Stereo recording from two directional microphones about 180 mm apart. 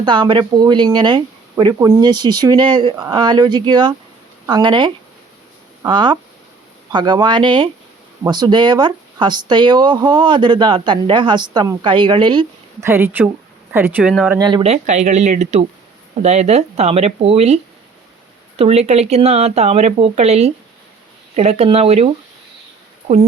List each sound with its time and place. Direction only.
0.0 s speech: 25° right (ahead or behind)
12.8 s speech: 15° right (ahead or behind)
14.3 s speech: 25° right (ahead or behind)
14.6 s speech: 40° right (ahead or behind)